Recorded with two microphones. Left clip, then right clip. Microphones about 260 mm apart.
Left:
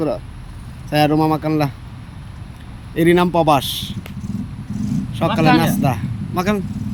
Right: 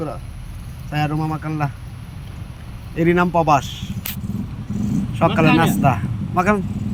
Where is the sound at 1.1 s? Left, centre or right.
Centre.